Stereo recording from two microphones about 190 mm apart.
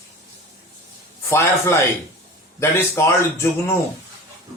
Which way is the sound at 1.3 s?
15° left (ahead or behind).